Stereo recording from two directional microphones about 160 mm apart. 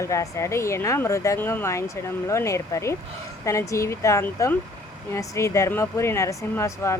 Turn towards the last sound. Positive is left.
turn(degrees=20)  # may be behind; listen again after turning